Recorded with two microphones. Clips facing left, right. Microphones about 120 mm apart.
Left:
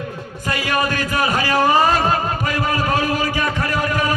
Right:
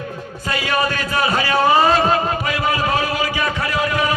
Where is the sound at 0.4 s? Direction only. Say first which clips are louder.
Even; 15° left (ahead or behind).